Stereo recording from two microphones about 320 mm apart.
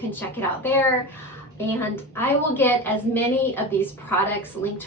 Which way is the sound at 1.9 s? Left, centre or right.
Centre.